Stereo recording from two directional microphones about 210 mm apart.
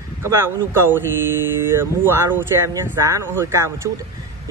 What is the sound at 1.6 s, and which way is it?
Speech, 10° right (ahead or behind).